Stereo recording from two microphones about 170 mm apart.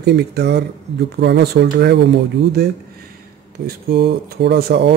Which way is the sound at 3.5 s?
70° right (ahead or behind).